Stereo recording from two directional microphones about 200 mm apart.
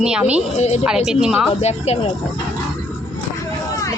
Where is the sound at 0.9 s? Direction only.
5° right (ahead or behind).